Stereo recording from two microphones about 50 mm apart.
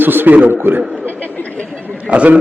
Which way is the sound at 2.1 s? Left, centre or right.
Right.